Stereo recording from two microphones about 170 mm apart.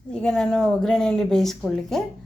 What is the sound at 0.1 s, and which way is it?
Speech, 5° left (ahead or behind).